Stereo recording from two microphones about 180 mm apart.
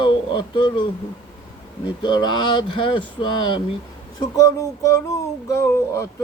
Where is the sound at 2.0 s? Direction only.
25° left (ahead or behind).